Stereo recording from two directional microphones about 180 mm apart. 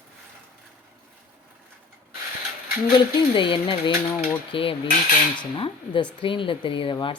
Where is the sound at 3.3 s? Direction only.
25° left (ahead or behind).